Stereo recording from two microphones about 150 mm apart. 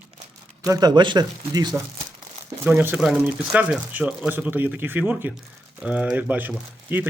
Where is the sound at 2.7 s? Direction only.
10° right (ahead or behind).